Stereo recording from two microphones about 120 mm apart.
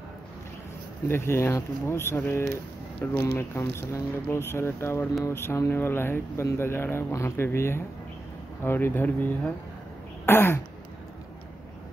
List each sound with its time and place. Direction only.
1.0 s speech: 20° left (ahead or behind)
10.2 s throat clearing: 20° left (ahead or behind)